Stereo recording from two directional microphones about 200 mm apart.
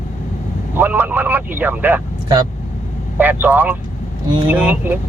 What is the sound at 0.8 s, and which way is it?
Speech, 10° right (ahead or behind).